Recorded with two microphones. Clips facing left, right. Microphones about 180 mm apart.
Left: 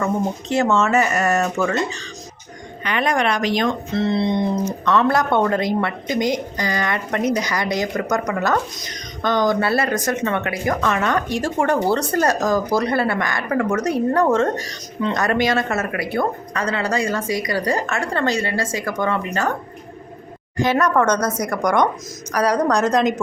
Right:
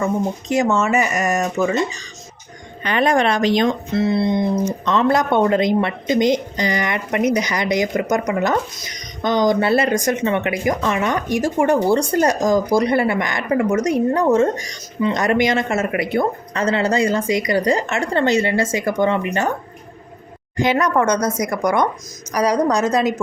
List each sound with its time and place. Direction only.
0.5 s speech: 10° right (ahead or behind)
2.8 s speech: 30° right (ahead or behind)
3.9 s speech: 5° right (ahead or behind)
4.9 s speech: 20° right (ahead or behind)
20.6 s speech: 15° right (ahead or behind)